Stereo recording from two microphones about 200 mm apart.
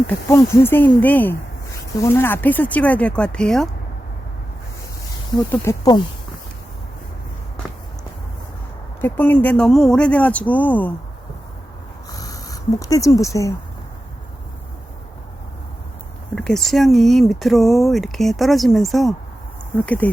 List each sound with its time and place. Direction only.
0.1 s speech: 15° left (ahead or behind)
5.5 s speech: 15° left (ahead or behind)
9.0 s speech: 10° left (ahead or behind)
12.1 s a sound: 15° left (ahead or behind)
16.3 s speech: 5° left (ahead or behind)